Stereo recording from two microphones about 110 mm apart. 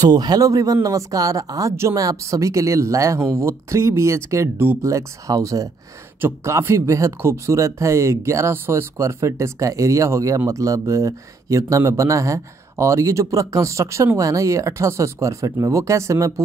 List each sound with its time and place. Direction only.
0.1 s a man's voice: 40° right (ahead or behind)